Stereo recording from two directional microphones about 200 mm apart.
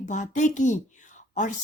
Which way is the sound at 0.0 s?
35° left (ahead or behind).